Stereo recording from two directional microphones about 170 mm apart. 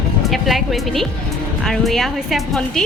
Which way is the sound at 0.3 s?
Centre (ahead or behind).